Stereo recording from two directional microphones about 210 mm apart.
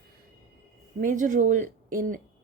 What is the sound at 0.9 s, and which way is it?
Speech, 40° right (ahead or behind).